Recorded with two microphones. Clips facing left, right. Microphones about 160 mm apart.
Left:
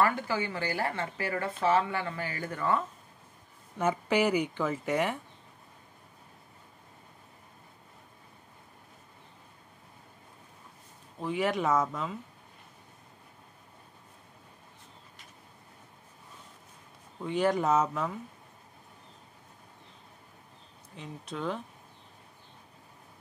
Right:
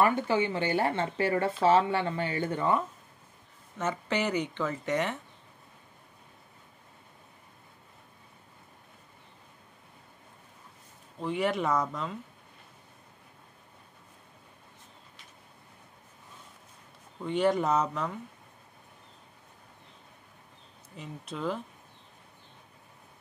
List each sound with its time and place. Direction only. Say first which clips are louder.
0.0 s speech: right 3 dB; 20° right (ahead or behind)
3.7 s speech: left 3 dB; 10° left (ahead or behind)
11.1 s speech: even; centre (ahead or behind)
17.2 s speech: right 1 dB; centre (ahead or behind)
20.9 s speech: even; centre (ahead or behind)